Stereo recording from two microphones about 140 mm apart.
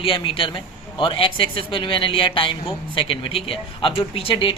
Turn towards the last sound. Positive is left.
turn(degrees=40)  # may be behind; listen again after turning